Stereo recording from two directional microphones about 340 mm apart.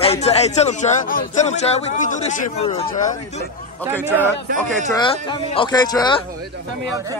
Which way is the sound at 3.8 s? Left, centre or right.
Centre.